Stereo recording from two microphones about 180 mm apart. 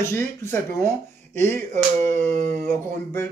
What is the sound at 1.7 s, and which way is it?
Speech, 40° right (ahead or behind).